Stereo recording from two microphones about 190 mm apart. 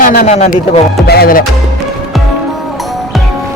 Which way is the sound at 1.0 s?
55° left (ahead or behind).